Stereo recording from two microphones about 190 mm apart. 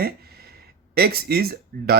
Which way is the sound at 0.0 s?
55° right (ahead or behind).